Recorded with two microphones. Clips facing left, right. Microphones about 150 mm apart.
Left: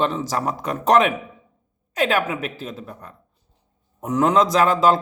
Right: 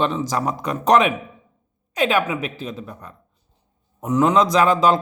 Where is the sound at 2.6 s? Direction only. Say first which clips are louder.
Right 2 dB; 5° left (ahead or behind).